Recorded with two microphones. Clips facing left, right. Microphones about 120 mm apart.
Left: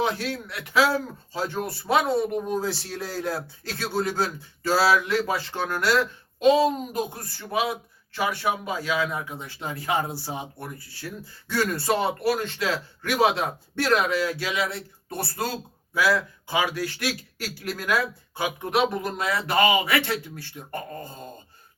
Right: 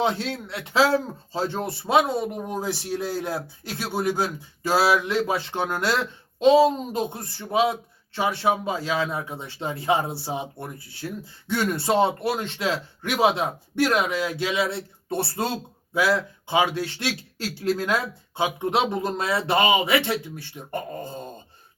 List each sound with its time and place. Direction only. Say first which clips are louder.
0.0 s speech: right 2 dB; 25° right (ahead or behind)